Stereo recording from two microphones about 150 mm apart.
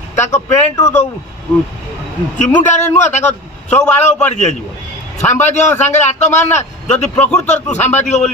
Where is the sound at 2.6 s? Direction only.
55° left (ahead or behind).